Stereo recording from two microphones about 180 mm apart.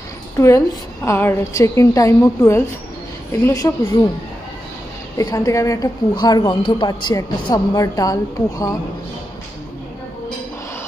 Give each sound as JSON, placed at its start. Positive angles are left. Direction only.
{"t": 0.4, "sound": "a woman's voice", "side_deg": 15}
{"t": 5.1, "sound": "a woman's voice", "side_deg": 20}